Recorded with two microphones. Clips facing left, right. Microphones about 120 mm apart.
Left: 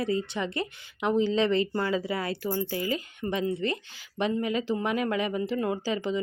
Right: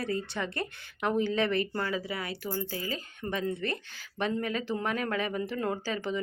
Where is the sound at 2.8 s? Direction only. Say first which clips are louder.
Left 6 dB; 35° right (ahead or behind).